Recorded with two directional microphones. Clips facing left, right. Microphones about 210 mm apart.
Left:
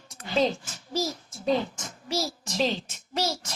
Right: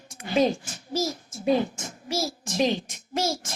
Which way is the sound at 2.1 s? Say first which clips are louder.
Right 1 dB; 50° right (ahead or behind).